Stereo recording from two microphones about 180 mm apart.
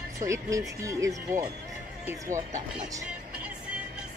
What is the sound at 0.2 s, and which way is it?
Speech, 15° right (ahead or behind).